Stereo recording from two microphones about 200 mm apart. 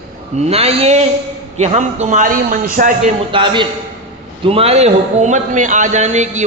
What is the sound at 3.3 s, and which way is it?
A man's voice, 25° right (ahead or behind).